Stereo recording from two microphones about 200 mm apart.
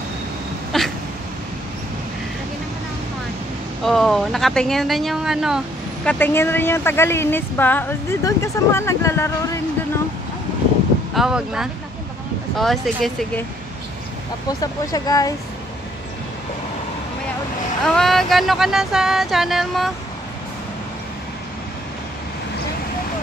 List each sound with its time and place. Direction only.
0.7 s a sound: centre (ahead or behind)
3.8 s speech: centre (ahead or behind)
6.0 s speech: 10° left (ahead or behind)
11.1 s speech: 5° right (ahead or behind)
14.6 s speech: 20° left (ahead or behind)
17.8 s speech: centre (ahead or behind)